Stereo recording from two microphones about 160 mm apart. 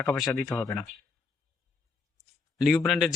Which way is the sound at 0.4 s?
20° left (ahead or behind).